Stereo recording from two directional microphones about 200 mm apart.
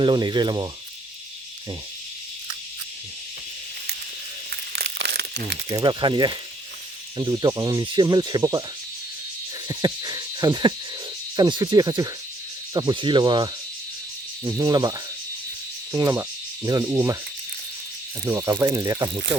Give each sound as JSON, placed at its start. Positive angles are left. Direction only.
{"t": 0.0, "sound": "speech", "side_deg": -25}
{"t": 4.7, "sound": "crumpling", "side_deg": -55}
{"t": 5.7, "sound": "speech", "side_deg": -20}
{"t": 9.6, "sound": "speech", "side_deg": -20}
{"t": 18.3, "sound": "speech", "side_deg": -15}